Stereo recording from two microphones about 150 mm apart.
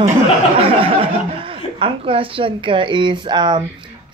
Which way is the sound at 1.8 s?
35° right (ahead or behind).